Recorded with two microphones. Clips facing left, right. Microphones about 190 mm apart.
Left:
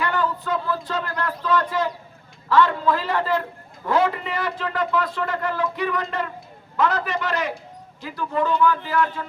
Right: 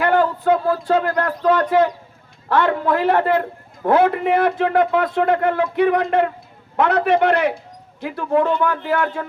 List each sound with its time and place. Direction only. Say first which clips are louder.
0.0 s a man's voice: right 8 dB; 55° right (ahead or behind)